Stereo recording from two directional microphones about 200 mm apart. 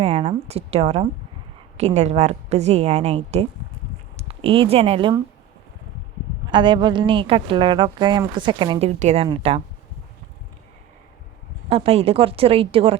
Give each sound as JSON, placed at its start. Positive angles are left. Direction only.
{"t": 0.0, "sound": "a woman's voice", "side_deg": -30}
{"t": 6.5, "sound": "speech", "side_deg": -25}
{"t": 11.7, "sound": "speech", "side_deg": -30}